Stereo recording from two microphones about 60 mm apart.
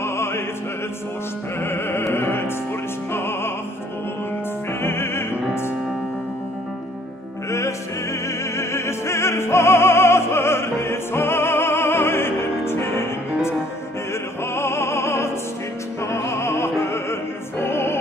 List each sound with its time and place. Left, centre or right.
0.0 s opera: left
1.6 s music: left
2.1 s opera: left
3.1 s music: left
4.8 s opera: left
7.5 s opera: left
14.5 s music: left
16.0 s opera: left